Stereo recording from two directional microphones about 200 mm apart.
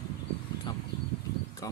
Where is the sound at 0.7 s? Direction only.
25° left (ahead or behind).